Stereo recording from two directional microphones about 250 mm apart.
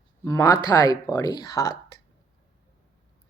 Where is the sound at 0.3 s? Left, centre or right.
Centre.